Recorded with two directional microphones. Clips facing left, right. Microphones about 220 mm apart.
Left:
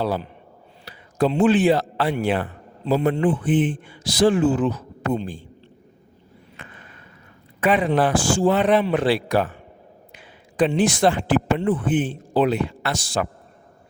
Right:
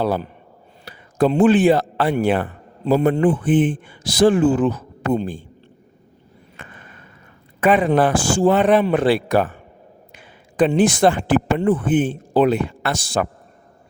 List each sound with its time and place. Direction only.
0.0 s a man's voice: 50° right (ahead or behind)
7.6 s speech: 50° right (ahead or behind)